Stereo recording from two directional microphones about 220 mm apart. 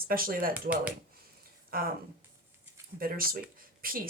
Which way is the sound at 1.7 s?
40° right (ahead or behind).